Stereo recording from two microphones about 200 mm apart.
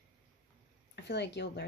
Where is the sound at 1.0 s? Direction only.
60° left (ahead or behind).